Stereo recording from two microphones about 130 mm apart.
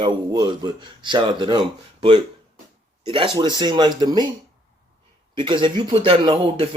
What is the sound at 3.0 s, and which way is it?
Speech, 45° right (ahead or behind).